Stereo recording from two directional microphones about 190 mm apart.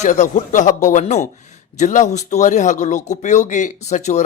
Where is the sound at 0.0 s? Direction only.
40° left (ahead or behind).